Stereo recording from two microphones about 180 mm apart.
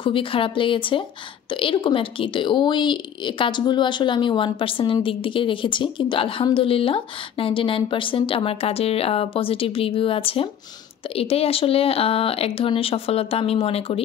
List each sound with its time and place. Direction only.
0.0 s speech: 30° left (ahead or behind)